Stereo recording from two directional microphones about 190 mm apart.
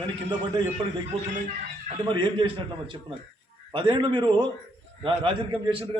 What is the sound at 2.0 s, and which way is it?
A man's voice, 25° right (ahead or behind).